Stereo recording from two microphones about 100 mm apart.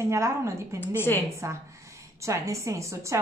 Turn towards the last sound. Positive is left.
turn(degrees=-30)  # may be behind; listen again after turning